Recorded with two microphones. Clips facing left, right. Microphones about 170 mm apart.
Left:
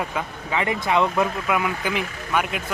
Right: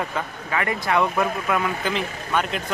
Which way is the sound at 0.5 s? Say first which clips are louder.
Left 1 dB; 20° left (ahead or behind).